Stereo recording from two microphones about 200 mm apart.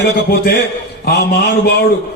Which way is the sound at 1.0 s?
55° left (ahead or behind).